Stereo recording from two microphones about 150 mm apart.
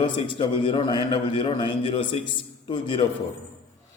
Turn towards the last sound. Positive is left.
turn(degrees=30)  # may be behind; listen again after turning